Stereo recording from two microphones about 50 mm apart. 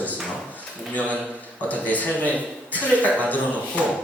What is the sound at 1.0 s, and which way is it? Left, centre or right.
Speech, right.